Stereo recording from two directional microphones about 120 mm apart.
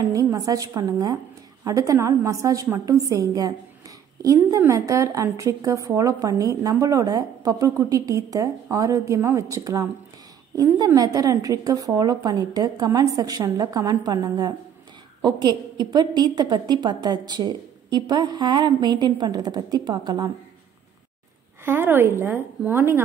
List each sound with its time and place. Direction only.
0.0 s a woman's voice: 30° right (ahead or behind)
10.9 s a woman's voice: 30° right (ahead or behind)
21.6 s a woman's voice: 15° right (ahead or behind)